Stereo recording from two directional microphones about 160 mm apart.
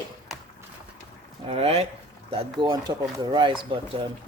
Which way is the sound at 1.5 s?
40° right (ahead or behind).